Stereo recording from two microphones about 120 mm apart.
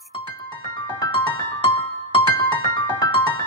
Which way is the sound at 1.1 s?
45° left (ahead or behind).